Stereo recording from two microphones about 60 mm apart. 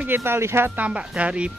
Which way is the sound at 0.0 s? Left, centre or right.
Right.